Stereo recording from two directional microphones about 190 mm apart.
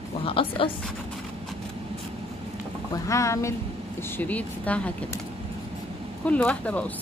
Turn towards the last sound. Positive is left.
turn(degrees=5)  # may be behind; listen again after turning